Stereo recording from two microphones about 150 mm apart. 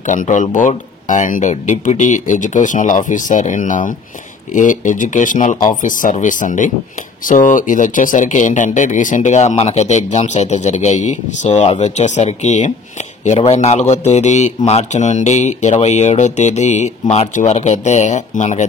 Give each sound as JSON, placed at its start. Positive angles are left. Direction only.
{"t": 0.0, "sound": "speech", "side_deg": 55}